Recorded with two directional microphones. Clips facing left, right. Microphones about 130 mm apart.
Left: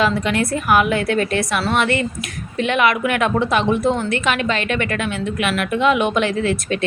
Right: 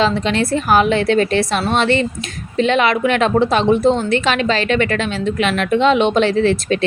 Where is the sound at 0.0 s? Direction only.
25° right (ahead or behind).